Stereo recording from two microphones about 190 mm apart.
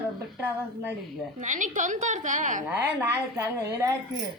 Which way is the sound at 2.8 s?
10° right (ahead or behind).